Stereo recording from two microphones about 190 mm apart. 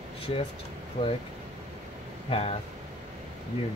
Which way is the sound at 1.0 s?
30° left (ahead or behind).